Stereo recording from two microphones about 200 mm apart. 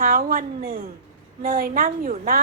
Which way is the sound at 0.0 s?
45° right (ahead or behind).